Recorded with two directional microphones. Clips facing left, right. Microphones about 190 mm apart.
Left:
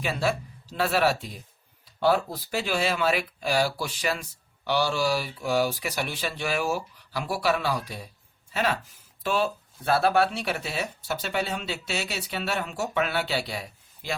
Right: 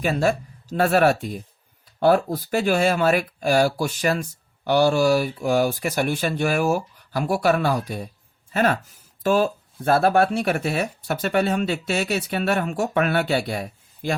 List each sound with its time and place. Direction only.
0.0 s speech: 45° right (ahead or behind)